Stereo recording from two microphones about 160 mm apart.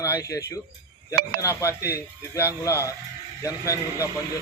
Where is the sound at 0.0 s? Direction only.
20° left (ahead or behind).